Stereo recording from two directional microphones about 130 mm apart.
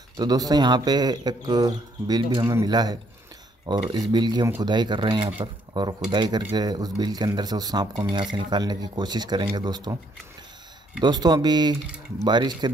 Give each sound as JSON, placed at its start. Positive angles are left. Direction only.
{"t": 0.2, "sound": "speech", "side_deg": -30}
{"t": 11.0, "sound": "speech", "side_deg": -35}